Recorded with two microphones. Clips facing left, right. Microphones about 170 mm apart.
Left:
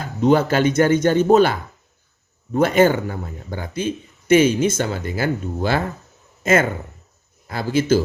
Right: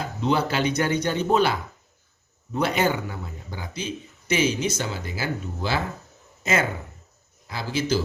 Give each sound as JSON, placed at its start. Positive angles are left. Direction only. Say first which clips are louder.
{"t": 0.2, "sound": "a man's voice", "louder": "left 8 dB", "side_deg": 45}